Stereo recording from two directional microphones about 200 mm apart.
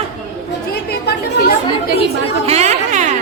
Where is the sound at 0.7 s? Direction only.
50° left (ahead or behind).